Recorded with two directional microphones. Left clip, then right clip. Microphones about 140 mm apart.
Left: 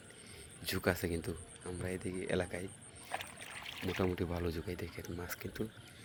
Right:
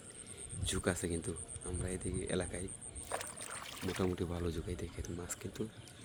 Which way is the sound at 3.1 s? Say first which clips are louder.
Even; 20° right (ahead or behind).